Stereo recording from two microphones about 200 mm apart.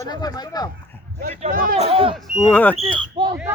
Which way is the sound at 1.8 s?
25° right (ahead or behind).